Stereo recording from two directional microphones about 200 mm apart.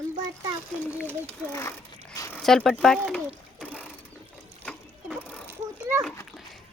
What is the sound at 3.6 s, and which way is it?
Ratchet, 10° left (ahead or behind).